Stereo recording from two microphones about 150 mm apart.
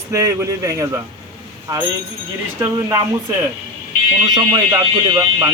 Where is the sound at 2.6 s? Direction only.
20° right (ahead or behind).